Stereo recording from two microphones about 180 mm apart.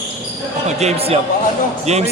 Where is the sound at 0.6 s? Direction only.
35° right (ahead or behind).